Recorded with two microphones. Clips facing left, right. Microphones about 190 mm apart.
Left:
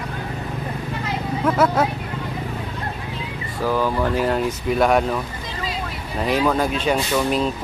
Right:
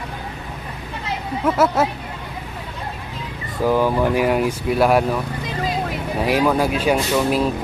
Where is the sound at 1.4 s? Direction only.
5° right (ahead or behind).